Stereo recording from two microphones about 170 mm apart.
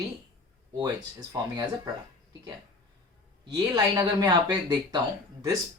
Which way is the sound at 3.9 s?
25° right (ahead or behind).